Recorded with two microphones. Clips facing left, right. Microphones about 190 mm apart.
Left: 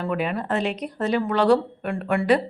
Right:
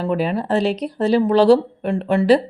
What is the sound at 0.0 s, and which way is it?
Speech, 30° right (ahead or behind).